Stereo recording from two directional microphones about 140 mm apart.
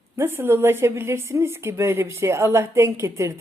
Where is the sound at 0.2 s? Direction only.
15° right (ahead or behind).